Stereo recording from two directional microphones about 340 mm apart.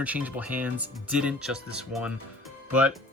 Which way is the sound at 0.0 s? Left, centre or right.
Centre.